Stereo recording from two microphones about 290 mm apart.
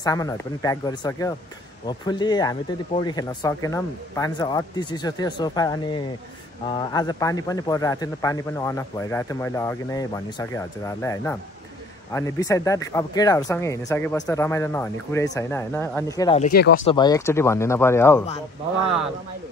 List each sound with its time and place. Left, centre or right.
0.0 s a man's voice: centre
16.3 s speech: left
16.8 s a man's voice: centre